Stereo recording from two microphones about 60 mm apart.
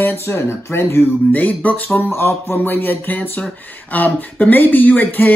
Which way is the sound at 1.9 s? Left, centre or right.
Left.